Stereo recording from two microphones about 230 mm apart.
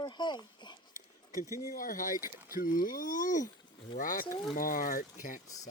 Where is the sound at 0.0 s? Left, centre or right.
Centre.